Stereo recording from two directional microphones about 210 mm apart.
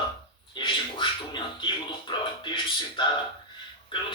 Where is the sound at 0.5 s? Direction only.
25° left (ahead or behind).